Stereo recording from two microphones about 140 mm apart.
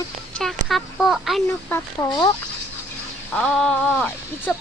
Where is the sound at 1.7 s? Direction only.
25° left (ahead or behind).